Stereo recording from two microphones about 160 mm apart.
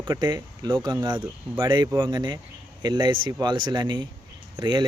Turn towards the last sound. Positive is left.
turn(degrees=-30)  # may be behind; listen again after turning